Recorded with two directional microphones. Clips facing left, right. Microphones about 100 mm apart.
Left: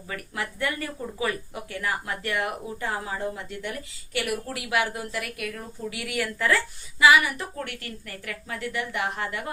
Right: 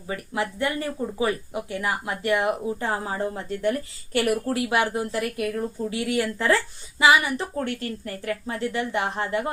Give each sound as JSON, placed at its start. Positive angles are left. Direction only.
{"t": 0.1, "sound": "speech", "side_deg": -25}